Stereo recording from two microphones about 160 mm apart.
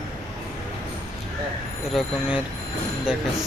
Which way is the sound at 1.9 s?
Centre (ahead or behind).